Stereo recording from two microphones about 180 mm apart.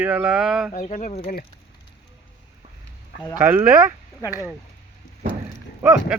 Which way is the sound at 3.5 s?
10° right (ahead or behind).